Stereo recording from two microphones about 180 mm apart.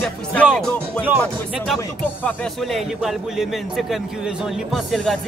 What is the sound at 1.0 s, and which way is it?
Speech, 10° right (ahead or behind).